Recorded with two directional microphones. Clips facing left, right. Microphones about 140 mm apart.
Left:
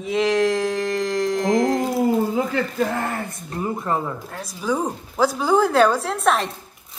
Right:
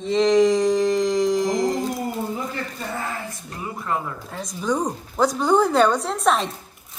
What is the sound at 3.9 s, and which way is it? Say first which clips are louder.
Speech: left 1 dB; 35° left (ahead or behind).